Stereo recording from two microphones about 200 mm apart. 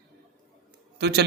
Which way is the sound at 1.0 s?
55° right (ahead or behind).